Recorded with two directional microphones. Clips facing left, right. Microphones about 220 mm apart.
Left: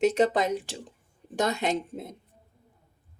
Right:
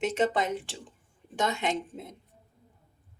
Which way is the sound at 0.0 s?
40° left (ahead or behind).